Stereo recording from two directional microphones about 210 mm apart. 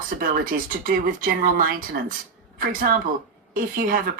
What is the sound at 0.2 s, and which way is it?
Speech, 45° right (ahead or behind).